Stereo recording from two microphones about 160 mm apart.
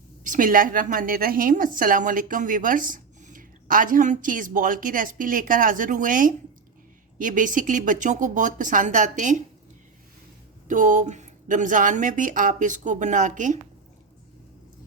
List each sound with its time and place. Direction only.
0.3 s a woman's voice: 60° right (ahead or behind)
10.7 s speech: 55° right (ahead or behind)